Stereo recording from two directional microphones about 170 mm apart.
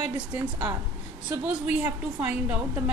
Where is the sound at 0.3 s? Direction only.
15° right (ahead or behind).